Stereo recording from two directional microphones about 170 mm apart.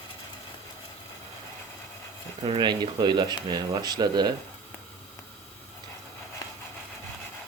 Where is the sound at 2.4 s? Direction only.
25° right (ahead or behind).